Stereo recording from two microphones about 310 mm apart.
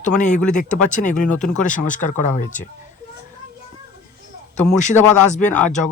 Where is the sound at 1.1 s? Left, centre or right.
Left.